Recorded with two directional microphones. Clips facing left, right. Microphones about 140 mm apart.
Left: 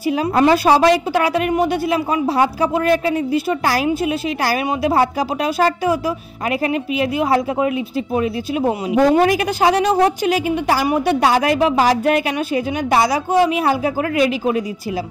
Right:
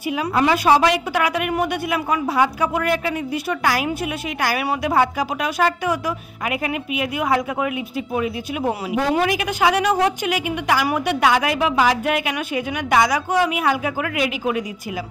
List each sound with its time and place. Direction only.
0.0 s a woman's voice: 35° left (ahead or behind)